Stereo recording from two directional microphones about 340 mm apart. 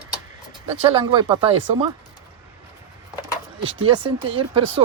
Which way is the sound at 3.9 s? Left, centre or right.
Centre.